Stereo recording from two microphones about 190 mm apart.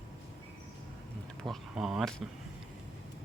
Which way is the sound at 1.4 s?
Centre (ahead or behind).